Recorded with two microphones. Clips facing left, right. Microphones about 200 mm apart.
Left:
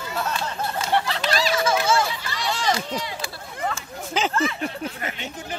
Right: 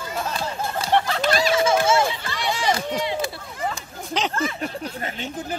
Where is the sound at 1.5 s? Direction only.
25° right (ahead or behind).